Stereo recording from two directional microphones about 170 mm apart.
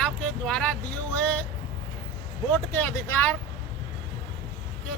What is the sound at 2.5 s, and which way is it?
Speech, 10° left (ahead or behind).